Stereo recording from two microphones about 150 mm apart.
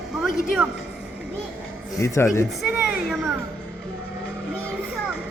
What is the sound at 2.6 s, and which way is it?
Speech, 5° right (ahead or behind).